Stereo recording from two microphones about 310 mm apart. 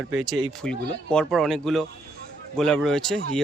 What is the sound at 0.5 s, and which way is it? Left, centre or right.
Speech, centre.